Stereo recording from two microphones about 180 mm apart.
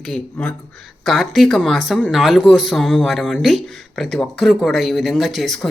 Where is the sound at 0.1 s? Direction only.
5° left (ahead or behind).